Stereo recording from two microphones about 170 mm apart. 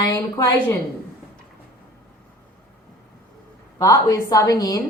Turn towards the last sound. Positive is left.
turn(degrees=20)  # may be behind; listen again after turning